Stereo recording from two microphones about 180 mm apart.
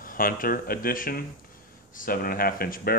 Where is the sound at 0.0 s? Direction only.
50° left (ahead or behind).